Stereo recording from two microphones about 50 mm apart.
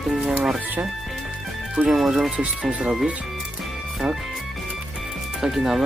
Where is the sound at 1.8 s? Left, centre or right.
Right.